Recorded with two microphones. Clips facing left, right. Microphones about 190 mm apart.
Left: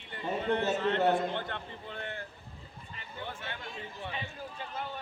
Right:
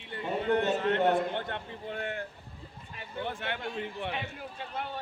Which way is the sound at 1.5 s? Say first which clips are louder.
Right 3 dB; 50° right (ahead or behind).